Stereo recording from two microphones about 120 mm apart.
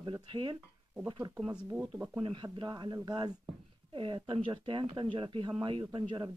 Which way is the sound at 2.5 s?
40° right (ahead or behind).